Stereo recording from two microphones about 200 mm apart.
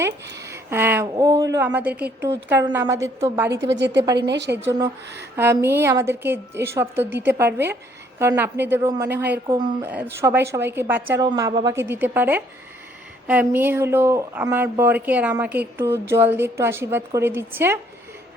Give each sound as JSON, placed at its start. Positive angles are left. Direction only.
{"t": 0.4, "sound": "speech", "side_deg": -15}
{"t": 3.5, "sound": "a woman's voice", "side_deg": -60}
{"t": 4.5, "sound": "speech", "side_deg": -15}